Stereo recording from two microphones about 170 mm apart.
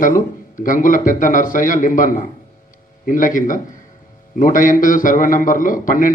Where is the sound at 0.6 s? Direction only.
50° left (ahead or behind).